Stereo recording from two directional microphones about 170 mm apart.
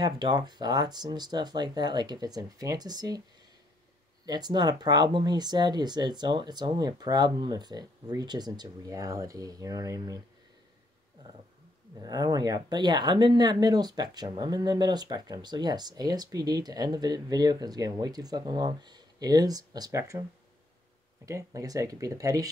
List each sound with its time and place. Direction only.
0.0 s speech: 25° right (ahead or behind)
4.3 s speech: 25° right (ahead or behind)
12.0 s speech: 20° right (ahead or behind)
21.3 s speech: 20° right (ahead or behind)